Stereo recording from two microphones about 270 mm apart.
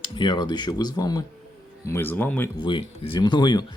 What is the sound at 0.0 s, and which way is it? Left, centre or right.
Speech, centre.